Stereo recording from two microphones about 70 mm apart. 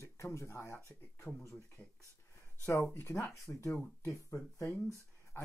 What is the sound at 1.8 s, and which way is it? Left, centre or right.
Speech, centre.